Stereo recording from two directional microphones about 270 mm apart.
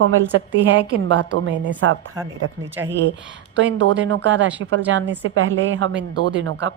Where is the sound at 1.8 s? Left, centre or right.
Right.